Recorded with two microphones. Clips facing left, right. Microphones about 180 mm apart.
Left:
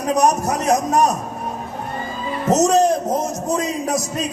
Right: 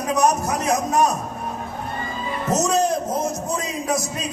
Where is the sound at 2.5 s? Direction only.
40° left (ahead or behind).